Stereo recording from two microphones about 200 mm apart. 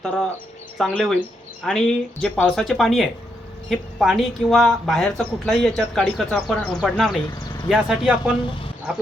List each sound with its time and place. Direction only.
0.8 s speech: centre (ahead or behind)
7.3 s vehicle: 20° left (ahead or behind)
7.7 s speech: 5° right (ahead or behind)